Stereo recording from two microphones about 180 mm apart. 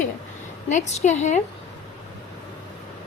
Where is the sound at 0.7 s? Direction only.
40° left (ahead or behind).